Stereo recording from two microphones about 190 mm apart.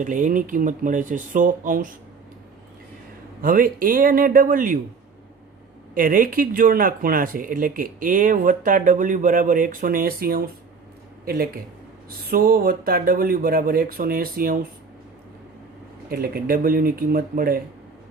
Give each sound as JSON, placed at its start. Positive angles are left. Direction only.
{"t": 0.0, "sound": "speech", "side_deg": -45}
{"t": 3.4, "sound": "speech", "side_deg": -50}
{"t": 5.9, "sound": "speech", "side_deg": -45}
{"t": 16.0, "sound": "speech", "side_deg": -50}